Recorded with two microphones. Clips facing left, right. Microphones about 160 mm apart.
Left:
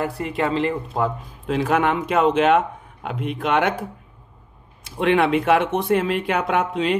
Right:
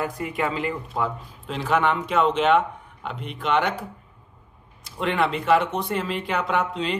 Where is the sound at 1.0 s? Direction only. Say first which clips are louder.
Left 5 dB; 5° left (ahead or behind).